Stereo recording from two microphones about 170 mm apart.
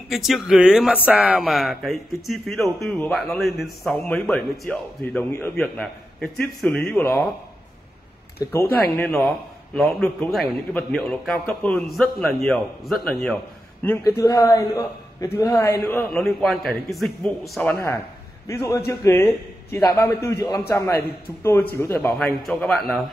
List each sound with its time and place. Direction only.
0.1 s a man's voice: centre (ahead or behind)
8.5 s a man's voice: 10° left (ahead or behind)
14.2 s a man's voice: 20° left (ahead or behind)
22.0 s speech: 5° left (ahead or behind)